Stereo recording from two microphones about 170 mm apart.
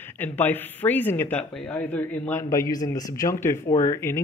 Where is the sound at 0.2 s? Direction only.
10° left (ahead or behind).